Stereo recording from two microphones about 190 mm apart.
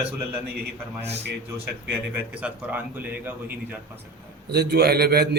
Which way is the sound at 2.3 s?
5° right (ahead or behind).